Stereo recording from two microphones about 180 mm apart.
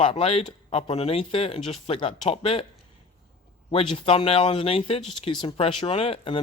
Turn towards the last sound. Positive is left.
turn(degrees=30)  # may be behind; listen again after turning